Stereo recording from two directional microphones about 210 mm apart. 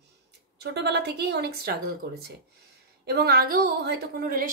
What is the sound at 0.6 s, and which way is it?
A woman's voice, 50° right (ahead or behind).